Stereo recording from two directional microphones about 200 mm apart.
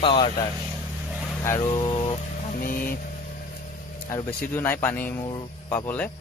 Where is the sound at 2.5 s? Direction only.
45° left (ahead or behind).